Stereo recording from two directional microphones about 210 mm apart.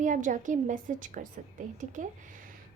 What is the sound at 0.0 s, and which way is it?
A woman's voice, 35° right (ahead or behind).